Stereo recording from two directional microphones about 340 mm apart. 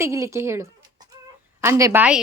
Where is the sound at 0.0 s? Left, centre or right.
Centre.